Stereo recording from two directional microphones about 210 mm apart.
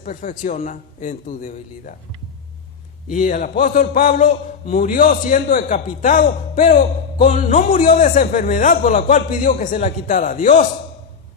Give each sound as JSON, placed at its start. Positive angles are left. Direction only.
{"t": 0.0, "sound": "a man's voice", "side_deg": 40}
{"t": 3.1, "sound": "a man's voice", "side_deg": 40}